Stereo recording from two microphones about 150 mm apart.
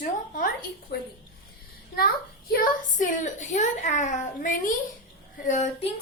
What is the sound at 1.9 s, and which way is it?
A child's voice, 85° left.